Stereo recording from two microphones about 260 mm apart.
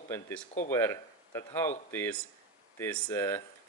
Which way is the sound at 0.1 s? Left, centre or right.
Centre.